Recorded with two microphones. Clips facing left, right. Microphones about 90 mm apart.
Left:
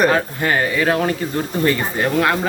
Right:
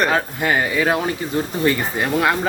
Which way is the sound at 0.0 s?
5° right (ahead or behind).